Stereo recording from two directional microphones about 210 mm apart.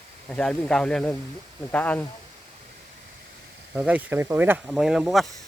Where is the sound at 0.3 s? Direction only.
5° left (ahead or behind).